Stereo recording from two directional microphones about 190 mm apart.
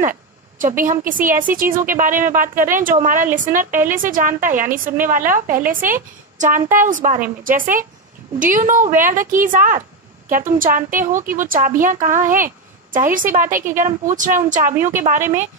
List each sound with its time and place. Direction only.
0.6 s a woman's voice: 45° right (ahead or behind)